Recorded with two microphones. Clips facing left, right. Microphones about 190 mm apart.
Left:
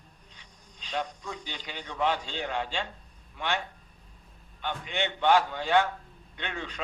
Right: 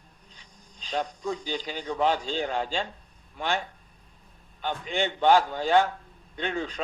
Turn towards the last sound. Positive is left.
turn(degrees=-35)  # may be behind; listen again after turning